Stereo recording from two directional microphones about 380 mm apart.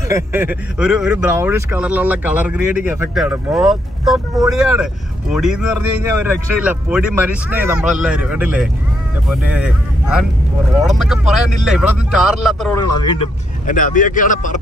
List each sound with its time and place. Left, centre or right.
0.1 s speech: centre; by 14.6 s left